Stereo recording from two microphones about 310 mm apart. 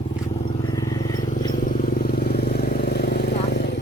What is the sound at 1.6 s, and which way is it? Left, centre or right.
Vehicle, left.